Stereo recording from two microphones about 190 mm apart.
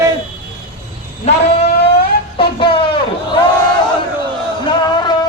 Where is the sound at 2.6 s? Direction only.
25° left (ahead or behind).